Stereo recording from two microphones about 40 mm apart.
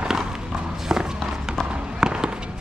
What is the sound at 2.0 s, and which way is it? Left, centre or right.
Fireworks, centre.